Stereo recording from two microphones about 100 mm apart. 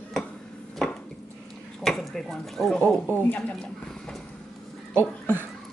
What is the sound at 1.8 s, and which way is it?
Speech, 5° left (ahead or behind).